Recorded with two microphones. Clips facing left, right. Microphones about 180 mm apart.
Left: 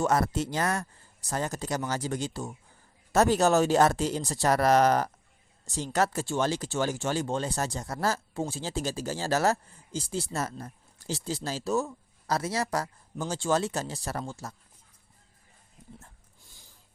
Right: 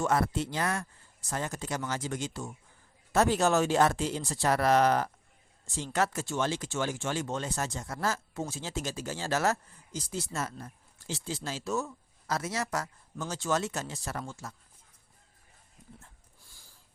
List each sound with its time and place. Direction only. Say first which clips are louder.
0.0 s speech: left 2 dB; 40° left (ahead or behind)